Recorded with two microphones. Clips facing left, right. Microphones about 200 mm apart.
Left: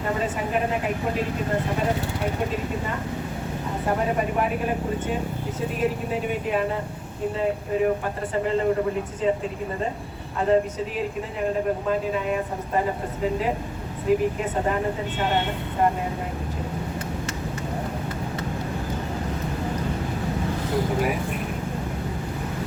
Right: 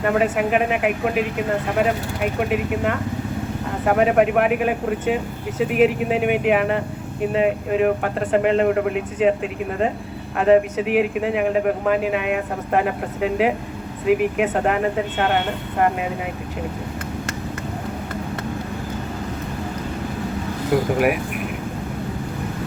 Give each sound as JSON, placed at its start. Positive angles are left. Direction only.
{"t": 0.0, "sound": "speech", "side_deg": -70}
{"t": 2.4, "sound": "speech", "side_deg": -70}
{"t": 20.7, "sound": "a sound", "side_deg": -60}